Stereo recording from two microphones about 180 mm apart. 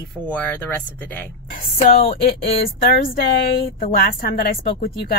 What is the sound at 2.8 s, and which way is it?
A woman's voice, 55° left (ahead or behind).